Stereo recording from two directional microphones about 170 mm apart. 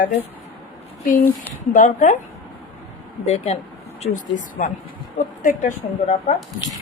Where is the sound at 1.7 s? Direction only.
50° left (ahead or behind).